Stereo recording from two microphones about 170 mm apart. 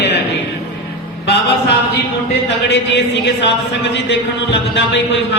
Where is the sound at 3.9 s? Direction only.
90° left.